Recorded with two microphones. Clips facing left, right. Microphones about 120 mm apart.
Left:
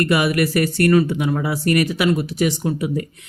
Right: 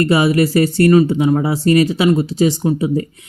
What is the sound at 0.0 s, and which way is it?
Speech, 30° right (ahead or behind).